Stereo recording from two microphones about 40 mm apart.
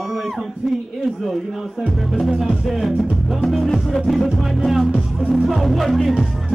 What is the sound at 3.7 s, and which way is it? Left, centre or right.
Music, centre.